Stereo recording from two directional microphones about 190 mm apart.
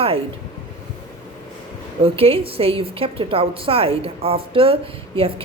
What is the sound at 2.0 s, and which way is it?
A woman's voice, 30° right (ahead or behind).